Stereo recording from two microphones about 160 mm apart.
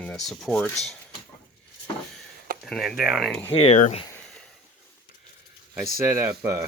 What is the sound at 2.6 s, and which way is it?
Speech, centre (ahead or behind).